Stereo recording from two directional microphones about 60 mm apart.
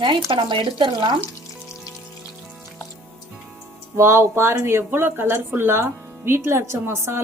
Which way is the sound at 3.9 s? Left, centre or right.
Right.